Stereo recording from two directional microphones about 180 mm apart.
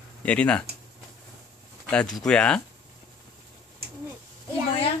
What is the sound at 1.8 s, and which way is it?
Speech, 5° left (ahead or behind).